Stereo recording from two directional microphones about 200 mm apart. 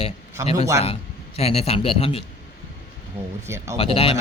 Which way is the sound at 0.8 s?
30° left (ahead or behind).